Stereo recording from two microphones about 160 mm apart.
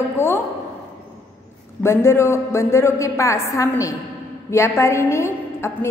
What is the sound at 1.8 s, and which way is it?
A woman's voice, 15° left (ahead or behind).